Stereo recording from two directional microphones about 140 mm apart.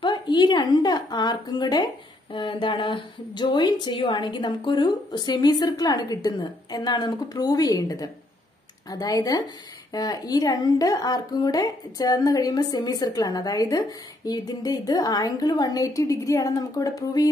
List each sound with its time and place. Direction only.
0.0 s a woman's voice: 30° left (ahead or behind)